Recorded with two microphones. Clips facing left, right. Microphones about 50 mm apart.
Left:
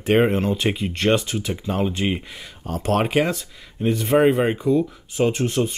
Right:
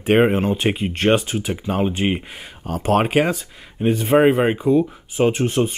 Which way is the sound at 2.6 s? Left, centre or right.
Centre.